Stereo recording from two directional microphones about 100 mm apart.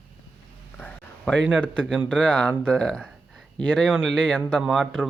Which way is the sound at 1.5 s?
10° left (ahead or behind).